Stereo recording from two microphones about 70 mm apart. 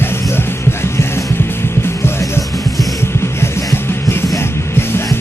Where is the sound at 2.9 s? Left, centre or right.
Left.